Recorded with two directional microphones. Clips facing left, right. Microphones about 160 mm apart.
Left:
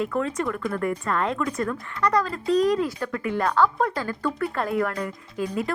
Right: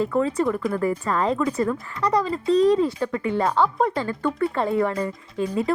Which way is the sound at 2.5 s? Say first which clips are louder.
Right 3 dB; 30° right (ahead or behind).